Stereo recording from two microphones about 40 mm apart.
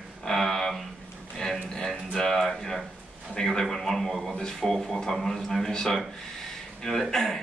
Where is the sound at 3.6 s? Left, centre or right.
Centre.